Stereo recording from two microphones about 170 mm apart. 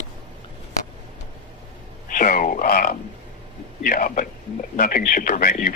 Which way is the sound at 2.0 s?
55° left (ahead or behind).